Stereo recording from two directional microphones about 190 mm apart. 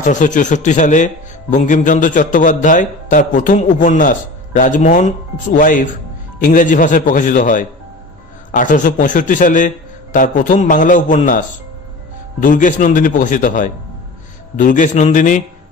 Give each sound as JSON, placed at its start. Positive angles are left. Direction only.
{"t": 0.0, "sound": "a man's voice", "side_deg": 40}